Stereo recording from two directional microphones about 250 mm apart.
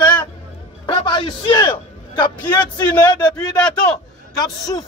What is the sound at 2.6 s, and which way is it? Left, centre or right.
A man's voice, centre.